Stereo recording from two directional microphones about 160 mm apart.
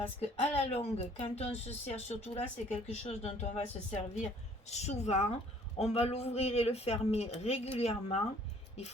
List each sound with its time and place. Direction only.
0.2 s a woman's voice: 40° left (ahead or behind)